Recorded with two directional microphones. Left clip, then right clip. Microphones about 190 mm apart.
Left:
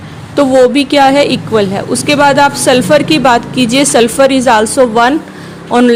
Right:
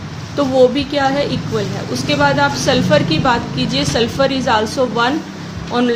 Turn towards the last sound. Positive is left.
turn(degrees=40)  # may be behind; listen again after turning